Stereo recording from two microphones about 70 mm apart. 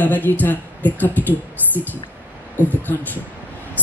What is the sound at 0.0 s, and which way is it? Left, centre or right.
Speech, left.